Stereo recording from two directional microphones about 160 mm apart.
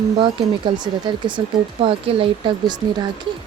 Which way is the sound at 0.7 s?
30° right (ahead or behind).